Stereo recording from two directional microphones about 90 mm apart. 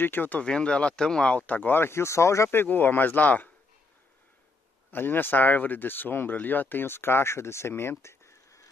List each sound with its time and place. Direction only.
0.0 s speech: 20° left (ahead or behind)
4.9 s speech: 25° left (ahead or behind)